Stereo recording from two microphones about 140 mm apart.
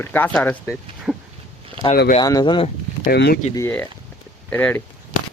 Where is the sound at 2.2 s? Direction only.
30° left (ahead or behind).